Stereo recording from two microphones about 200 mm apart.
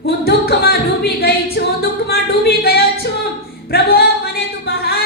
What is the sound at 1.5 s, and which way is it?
Singing, 55° left (ahead or behind).